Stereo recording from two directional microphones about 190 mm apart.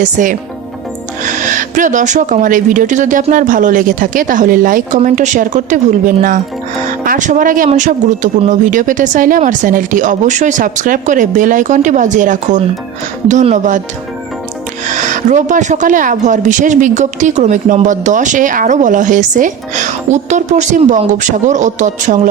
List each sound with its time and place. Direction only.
0.0 s speech: 45° right (ahead or behind)
14.9 s speech: 40° right (ahead or behind)